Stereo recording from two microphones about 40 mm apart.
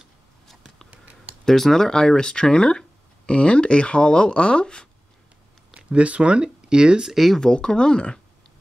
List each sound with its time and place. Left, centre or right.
0.8 s a sound: right
1.4 s speech: centre
3.3 s speech: left
5.8 s speech: right
7.1 s speech: centre
7.3 s speech: centre